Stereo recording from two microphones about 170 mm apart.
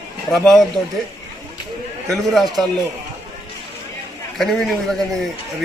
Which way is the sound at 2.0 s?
Centre (ahead or behind).